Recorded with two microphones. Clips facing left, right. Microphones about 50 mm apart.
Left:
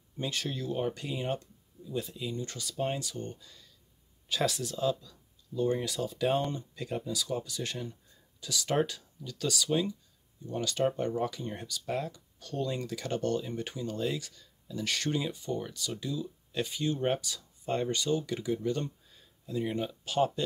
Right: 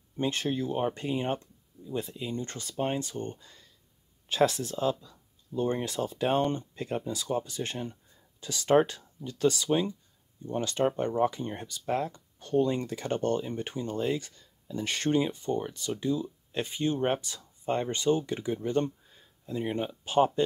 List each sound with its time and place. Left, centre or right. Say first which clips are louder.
0.2 s speech: right 5 dB; right